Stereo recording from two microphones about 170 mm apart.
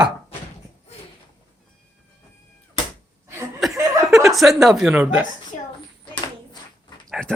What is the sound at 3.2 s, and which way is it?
Chuckle, 15° right (ahead or behind).